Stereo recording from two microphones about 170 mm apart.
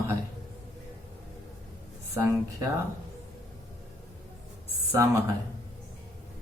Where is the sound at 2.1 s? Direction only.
15° right (ahead or behind).